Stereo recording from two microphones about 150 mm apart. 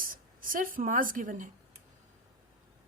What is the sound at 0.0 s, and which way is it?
Speech, 70° right (ahead or behind).